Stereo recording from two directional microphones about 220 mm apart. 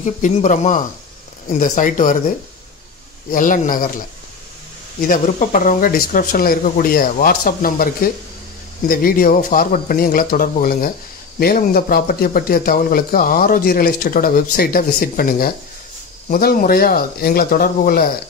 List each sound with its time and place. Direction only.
0.0 s speech: 35° left (ahead or behind)
3.3 s speech: 35° left (ahead or behind)
5.0 s speech: 35° left (ahead or behind)